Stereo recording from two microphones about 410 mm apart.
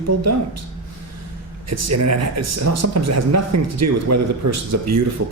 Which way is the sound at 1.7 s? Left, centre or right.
Right.